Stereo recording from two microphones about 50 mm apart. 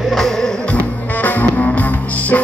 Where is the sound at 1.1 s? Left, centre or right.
Left.